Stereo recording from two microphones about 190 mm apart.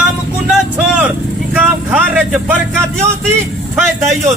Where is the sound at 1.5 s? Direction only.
10° right (ahead or behind).